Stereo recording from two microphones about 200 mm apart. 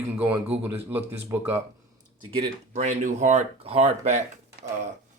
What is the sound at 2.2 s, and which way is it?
Speech, 30° right (ahead or behind).